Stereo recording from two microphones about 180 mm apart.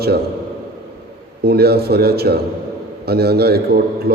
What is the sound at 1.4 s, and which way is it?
A man's voice, 60° right (ahead or behind).